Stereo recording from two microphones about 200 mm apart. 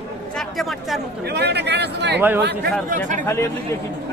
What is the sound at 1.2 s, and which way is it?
Speech, 55° right (ahead or behind).